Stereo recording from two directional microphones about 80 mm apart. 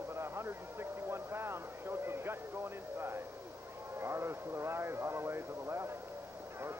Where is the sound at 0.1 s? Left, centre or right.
Right.